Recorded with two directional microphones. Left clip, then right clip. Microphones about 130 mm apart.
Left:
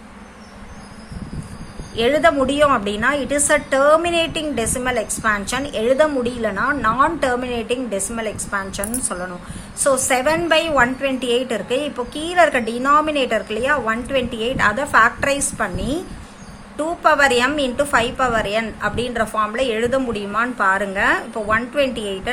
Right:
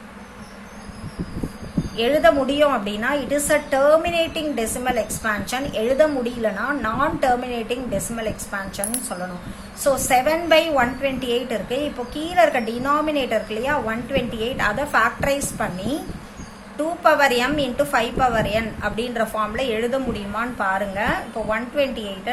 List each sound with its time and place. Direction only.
2.0 s a woman's voice: 35° left (ahead or behind)